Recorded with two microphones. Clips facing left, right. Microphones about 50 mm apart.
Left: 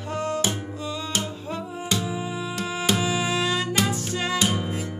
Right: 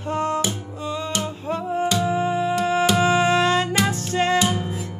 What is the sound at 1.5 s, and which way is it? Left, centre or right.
Music, right.